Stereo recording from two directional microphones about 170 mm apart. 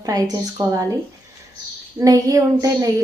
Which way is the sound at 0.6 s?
20° right (ahead or behind).